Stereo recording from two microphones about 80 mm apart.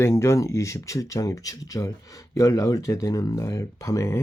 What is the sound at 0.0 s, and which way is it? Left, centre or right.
Speech, left.